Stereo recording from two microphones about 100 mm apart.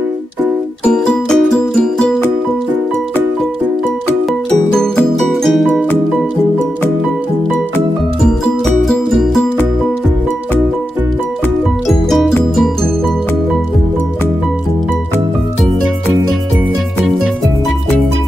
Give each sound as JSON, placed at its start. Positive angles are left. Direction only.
{"t": 0.9, "sound": "music", "side_deg": 10}
{"t": 4.7, "sound": "music", "side_deg": 5}
{"t": 8.6, "sound": "music", "side_deg": 0}
{"t": 11.9, "sound": "music", "side_deg": 0}